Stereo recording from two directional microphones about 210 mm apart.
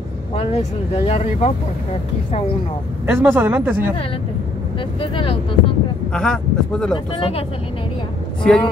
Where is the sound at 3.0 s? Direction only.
10° right (ahead or behind).